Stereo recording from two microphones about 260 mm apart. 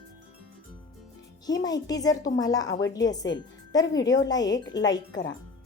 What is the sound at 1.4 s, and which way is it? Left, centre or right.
A woman's voice, centre.